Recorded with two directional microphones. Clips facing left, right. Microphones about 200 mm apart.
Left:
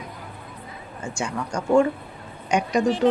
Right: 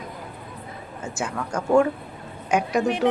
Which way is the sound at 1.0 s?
5° right (ahead or behind).